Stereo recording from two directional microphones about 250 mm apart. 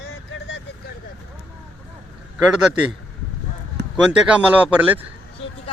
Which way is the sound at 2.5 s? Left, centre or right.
Centre.